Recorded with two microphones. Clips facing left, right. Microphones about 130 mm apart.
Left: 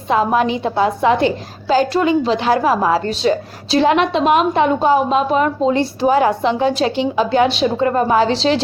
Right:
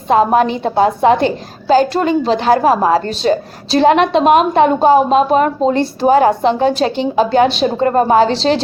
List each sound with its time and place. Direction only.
0.1 s a woman's voice: 45° right (ahead or behind)